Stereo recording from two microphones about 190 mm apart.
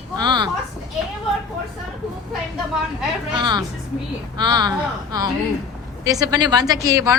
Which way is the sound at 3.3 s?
25° right (ahead or behind).